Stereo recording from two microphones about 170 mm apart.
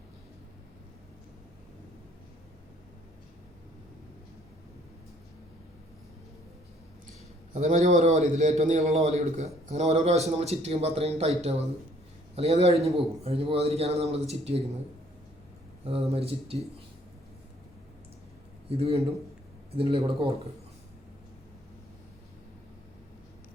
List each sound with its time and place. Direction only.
7.5 s a man's voice: 40° right (ahead or behind)
15.8 s a man's voice: 35° right (ahead or behind)
18.8 s a man's voice: 35° right (ahead or behind)